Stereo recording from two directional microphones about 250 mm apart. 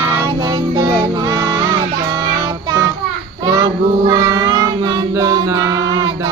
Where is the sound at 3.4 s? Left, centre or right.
Centre.